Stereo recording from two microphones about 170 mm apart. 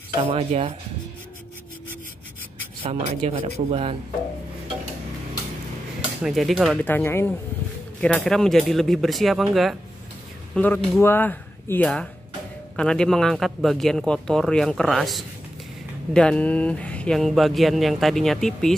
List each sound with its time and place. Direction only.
0.2 s speech: 35° right (ahead or behind)
2.8 s speech: 35° right (ahead or behind)
6.2 s speech: centre (ahead or behind)
6.8 s speech: 10° left (ahead or behind)